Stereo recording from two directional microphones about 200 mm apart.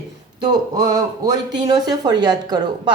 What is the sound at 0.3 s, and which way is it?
Speech, 20° right (ahead or behind).